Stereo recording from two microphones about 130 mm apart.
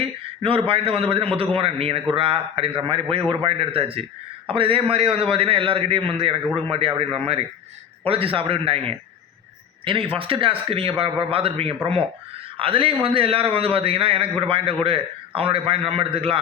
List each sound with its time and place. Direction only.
0.0 s a man's voice: 45° right (ahead or behind)